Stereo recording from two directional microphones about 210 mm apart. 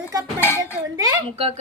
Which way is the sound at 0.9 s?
25° right (ahead or behind).